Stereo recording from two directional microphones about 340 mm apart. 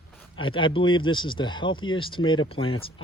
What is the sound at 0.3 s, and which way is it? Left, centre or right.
Speech, centre.